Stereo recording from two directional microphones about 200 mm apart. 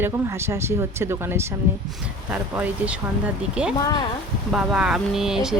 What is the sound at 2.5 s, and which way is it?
Speech, 10° right (ahead or behind).